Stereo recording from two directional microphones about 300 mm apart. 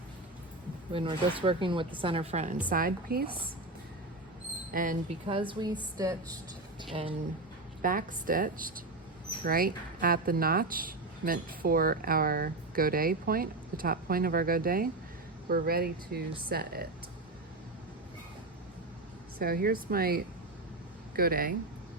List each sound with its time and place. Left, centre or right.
0.9 s speech: centre
4.7 s speech: right
7.8 s speech: right
19.4 s speech: right